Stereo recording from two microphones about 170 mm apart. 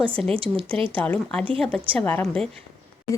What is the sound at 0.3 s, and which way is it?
Speech, 35° right (ahead or behind).